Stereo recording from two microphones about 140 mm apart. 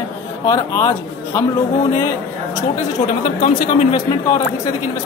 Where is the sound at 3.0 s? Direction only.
45° left (ahead or behind).